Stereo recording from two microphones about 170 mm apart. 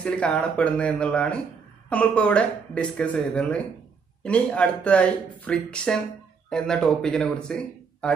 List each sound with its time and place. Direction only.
0.0 s a man's voice: 5° left (ahead or behind)